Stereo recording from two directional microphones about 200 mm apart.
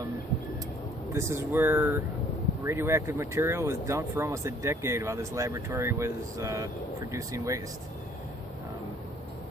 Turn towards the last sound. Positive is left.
turn(degrees=-15)  # may be behind; listen again after turning